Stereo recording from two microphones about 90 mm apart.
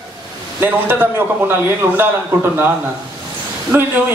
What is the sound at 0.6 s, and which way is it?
A man's voice, 20° right (ahead or behind).